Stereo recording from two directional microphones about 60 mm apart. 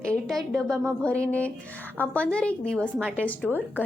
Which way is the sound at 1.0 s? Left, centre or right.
Centre.